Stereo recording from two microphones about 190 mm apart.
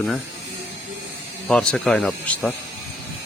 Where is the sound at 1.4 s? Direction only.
5° left (ahead or behind).